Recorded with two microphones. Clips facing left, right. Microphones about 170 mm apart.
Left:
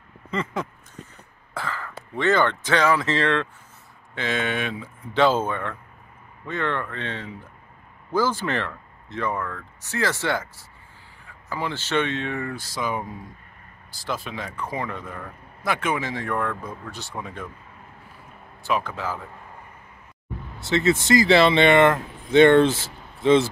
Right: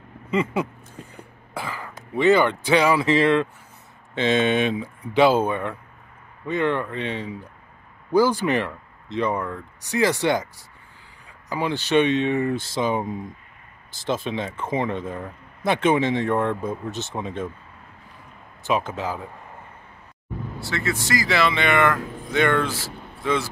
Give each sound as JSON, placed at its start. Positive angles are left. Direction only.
{"t": 0.3, "sound": "speech", "side_deg": -10}
{"t": 4.1, "sound": "speech", "side_deg": -25}
{"t": 18.6, "sound": "speech", "side_deg": -20}
{"t": 20.5, "sound": "speech", "side_deg": 20}